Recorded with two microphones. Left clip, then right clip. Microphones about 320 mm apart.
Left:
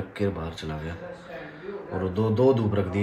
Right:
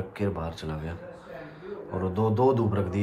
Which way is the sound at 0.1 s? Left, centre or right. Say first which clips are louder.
Left 3 dB; centre.